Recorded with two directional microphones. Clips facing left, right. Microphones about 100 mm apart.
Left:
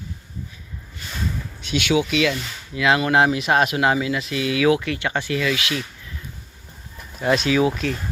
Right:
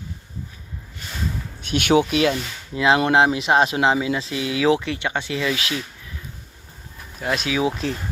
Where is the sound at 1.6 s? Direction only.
50° right (ahead or behind); by 5.5 s 20° right (ahead or behind).